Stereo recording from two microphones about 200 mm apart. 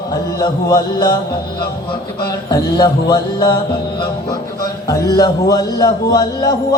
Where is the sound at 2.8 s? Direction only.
25° left (ahead or behind).